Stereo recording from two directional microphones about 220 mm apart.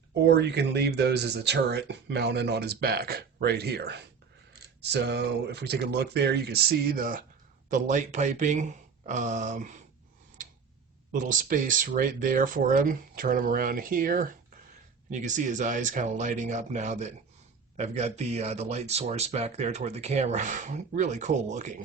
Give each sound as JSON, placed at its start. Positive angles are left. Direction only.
{"t": 0.3, "sound": "speech", "side_deg": -50}
{"t": 11.1, "sound": "speech", "side_deg": -35}